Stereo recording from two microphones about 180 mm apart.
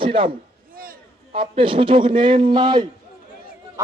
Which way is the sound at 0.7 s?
50° right (ahead or behind).